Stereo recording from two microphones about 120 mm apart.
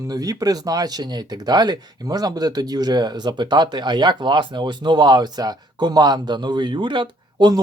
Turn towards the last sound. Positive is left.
turn(degrees=-35)  # may be behind; listen again after turning